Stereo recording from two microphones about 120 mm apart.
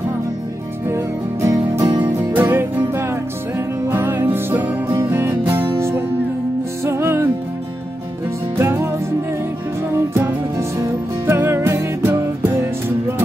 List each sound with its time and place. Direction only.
0.8 s music: 25° right (ahead or behind)
8.5 s music: 20° right (ahead or behind)
10.8 s music: 20° right (ahead or behind)